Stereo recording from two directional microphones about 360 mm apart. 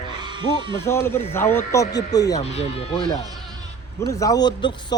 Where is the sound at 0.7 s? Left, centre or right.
Centre.